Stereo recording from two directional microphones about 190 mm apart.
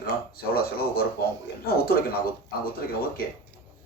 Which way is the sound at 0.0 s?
55° left (ahead or behind).